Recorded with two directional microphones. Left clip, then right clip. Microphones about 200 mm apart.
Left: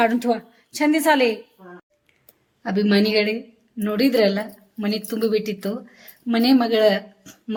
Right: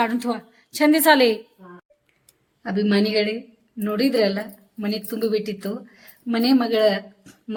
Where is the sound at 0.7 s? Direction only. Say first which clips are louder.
Right 2 dB; 15° right (ahead or behind).